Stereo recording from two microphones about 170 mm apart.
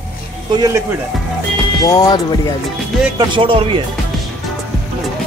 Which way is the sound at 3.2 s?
30° right (ahead or behind).